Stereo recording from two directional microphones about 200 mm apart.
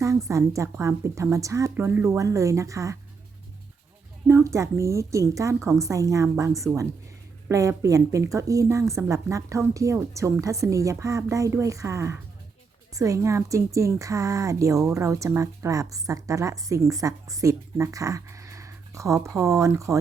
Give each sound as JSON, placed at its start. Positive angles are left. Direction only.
{"t": 0.3, "sound": "a woman's voice", "side_deg": -15}
{"t": 4.3, "sound": "a woman's voice", "side_deg": -15}